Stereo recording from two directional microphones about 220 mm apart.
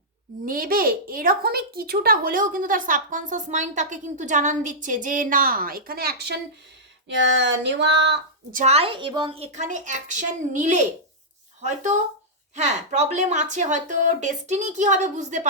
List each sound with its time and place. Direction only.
0.4 s speech: 40° right (ahead or behind)
7.1 s a sound: 55° right (ahead or behind)
8.5 s speech: 30° right (ahead or behind)